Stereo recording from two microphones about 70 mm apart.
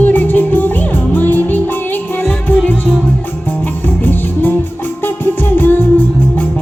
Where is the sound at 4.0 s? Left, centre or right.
Left.